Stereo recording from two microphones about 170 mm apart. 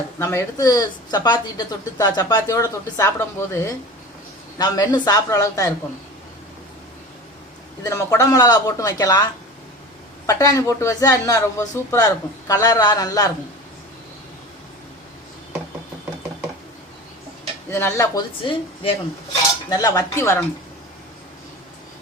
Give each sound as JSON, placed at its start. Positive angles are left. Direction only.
{"t": 0.2, "sound": "speech", "side_deg": 15}
{"t": 7.9, "sound": "speech", "side_deg": 20}
{"t": 10.2, "sound": "speech", "side_deg": 20}
{"t": 17.7, "sound": "speech", "side_deg": 15}